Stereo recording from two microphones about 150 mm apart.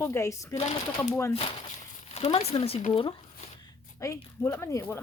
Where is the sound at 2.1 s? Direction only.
45° left (ahead or behind).